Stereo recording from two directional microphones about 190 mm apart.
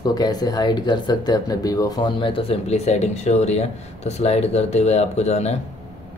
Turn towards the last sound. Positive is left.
turn(degrees=35)  # may be behind; listen again after turning